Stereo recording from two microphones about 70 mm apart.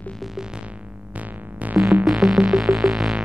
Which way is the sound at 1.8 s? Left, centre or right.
Centre.